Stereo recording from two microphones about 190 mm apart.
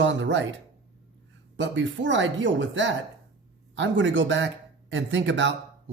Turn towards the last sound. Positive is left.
turn(degrees=-70)  # may be behind; listen again after turning